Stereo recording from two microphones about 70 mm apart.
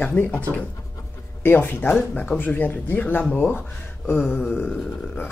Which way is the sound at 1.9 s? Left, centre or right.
Centre.